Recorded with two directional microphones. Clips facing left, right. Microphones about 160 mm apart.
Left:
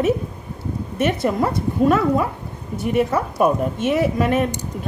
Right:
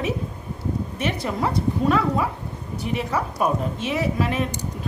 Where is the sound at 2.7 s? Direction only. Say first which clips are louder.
Left 6 dB; 50° left (ahead or behind).